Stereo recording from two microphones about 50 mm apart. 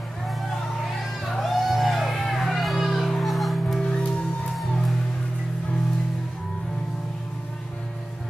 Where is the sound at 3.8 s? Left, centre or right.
Centre.